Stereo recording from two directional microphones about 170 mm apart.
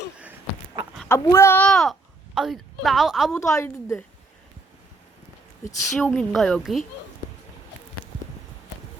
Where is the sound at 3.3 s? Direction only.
15° left (ahead or behind).